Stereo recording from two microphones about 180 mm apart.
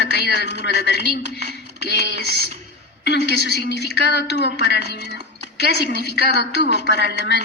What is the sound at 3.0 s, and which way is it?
A woman's voice, 70° left (ahead or behind).